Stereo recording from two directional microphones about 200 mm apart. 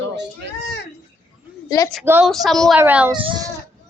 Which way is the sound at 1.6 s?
15° left (ahead or behind).